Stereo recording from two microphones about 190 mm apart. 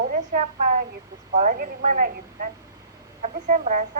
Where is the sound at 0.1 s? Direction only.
40° right (ahead or behind).